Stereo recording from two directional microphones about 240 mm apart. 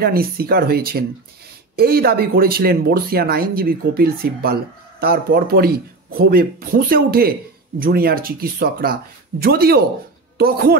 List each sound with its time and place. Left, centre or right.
0.0 s speech: right